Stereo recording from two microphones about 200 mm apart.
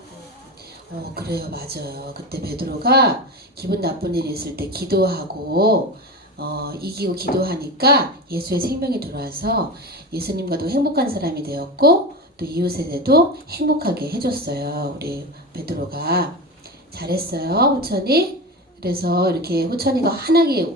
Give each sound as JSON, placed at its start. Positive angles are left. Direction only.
{"t": 1.1, "sound": "speech", "side_deg": -50}